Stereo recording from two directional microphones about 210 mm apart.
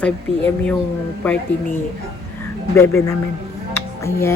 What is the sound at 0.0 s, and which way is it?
Speech, 5° left (ahead or behind).